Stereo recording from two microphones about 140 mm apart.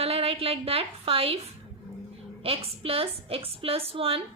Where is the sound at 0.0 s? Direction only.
45° right (ahead or behind).